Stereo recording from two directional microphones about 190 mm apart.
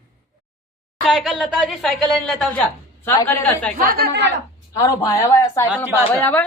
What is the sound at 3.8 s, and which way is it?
Speech, 50° right (ahead or behind).